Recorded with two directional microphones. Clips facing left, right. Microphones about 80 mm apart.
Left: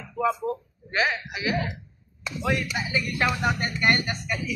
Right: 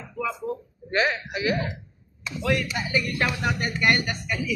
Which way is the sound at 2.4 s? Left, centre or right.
Centre.